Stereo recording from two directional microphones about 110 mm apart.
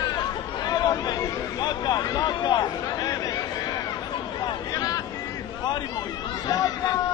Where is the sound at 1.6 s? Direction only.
40° left (ahead or behind).